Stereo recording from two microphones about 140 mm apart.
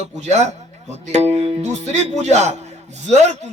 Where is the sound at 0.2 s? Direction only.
55° right (ahead or behind).